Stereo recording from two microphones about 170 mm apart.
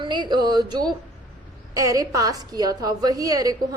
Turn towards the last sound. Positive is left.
turn(degrees=-20)  # may be behind; listen again after turning